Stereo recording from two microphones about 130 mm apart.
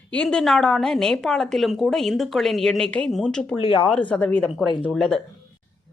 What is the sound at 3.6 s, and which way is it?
Speech, 40° left (ahead or behind).